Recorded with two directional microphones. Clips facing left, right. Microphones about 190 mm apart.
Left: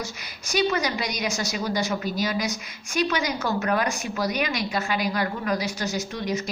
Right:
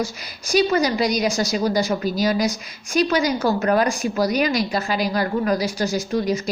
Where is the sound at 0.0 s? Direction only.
35° right (ahead or behind).